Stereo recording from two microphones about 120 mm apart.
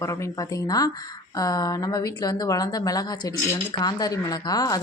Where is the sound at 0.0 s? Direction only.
25° left (ahead or behind).